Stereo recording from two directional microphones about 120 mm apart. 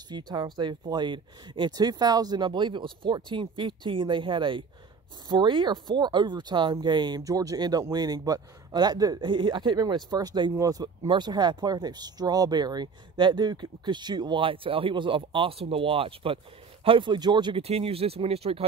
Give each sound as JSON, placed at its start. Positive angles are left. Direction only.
{"t": 0.1, "sound": "speech", "side_deg": -35}
{"t": 17.6, "sound": "speech", "side_deg": -55}